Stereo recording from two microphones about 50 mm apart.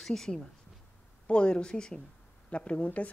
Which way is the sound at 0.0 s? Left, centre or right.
Centre.